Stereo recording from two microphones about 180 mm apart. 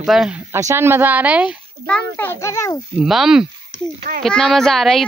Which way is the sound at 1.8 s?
10° left (ahead or behind).